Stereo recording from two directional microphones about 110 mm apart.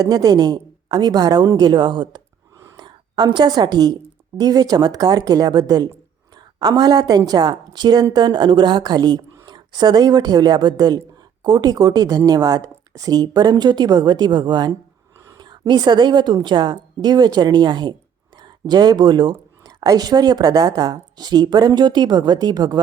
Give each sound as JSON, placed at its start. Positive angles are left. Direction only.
{"t": 0.0, "sound": "a woman's voice", "side_deg": -35}